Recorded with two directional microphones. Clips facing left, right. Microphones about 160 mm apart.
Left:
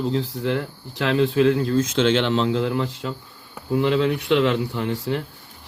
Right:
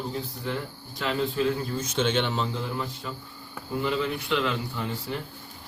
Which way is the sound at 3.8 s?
75° left (ahead or behind).